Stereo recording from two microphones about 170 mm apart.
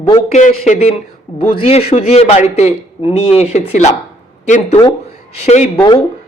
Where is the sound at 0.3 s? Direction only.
45° left (ahead or behind).